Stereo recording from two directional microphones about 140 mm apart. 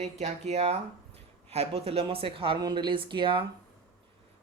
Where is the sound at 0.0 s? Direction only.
55° right (ahead or behind); by 3.4 s 35° right (ahead or behind).